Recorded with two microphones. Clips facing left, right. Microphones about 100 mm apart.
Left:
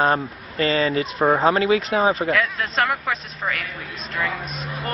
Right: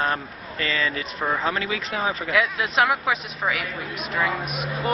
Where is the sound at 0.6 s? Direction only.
35° left (ahead or behind).